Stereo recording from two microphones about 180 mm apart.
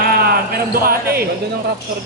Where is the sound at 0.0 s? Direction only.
55° right (ahead or behind).